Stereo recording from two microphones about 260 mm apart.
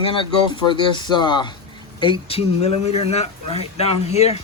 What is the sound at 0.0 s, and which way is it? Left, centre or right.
Speech, centre.